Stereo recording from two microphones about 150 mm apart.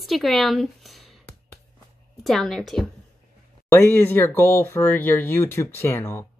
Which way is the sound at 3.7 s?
15° left (ahead or behind).